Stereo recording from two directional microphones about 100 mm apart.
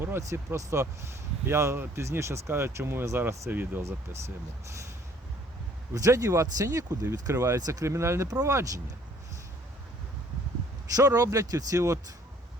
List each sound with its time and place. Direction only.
0.0 s speech: 30° right (ahead or behind)
5.9 s speech: 35° right (ahead or behind)
10.9 s speech: 35° right (ahead or behind)